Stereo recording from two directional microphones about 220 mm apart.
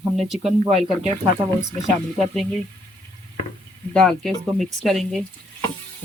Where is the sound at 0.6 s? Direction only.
30° right (ahead or behind).